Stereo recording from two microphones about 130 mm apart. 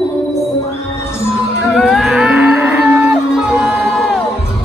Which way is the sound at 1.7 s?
Centre (ahead or behind).